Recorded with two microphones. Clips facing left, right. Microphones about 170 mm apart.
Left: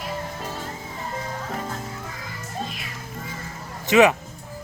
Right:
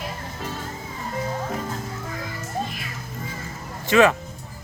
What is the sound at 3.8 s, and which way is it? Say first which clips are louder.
Speech: left 1 dB; 15° left (ahead or behind).